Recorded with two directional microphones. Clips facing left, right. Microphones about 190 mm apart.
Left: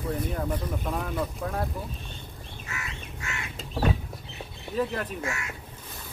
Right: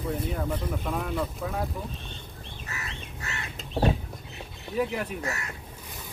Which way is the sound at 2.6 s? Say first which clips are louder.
Left 1 dB; 35° right (ahead or behind).